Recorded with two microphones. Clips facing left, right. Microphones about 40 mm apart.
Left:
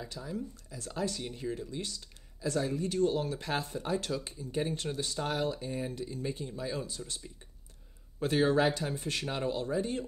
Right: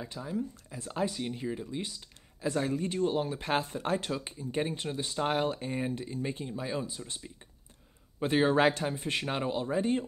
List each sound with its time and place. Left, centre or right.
0.0 s speech: right
3.4 s speech: right
4.0 s speech: right
5.3 s speech: right
8.5 s speech: right
8.8 s speech: right